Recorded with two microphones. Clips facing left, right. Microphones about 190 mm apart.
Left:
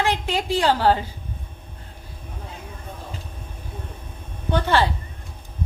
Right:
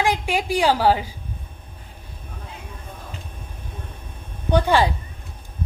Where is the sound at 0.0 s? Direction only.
10° right (ahead or behind).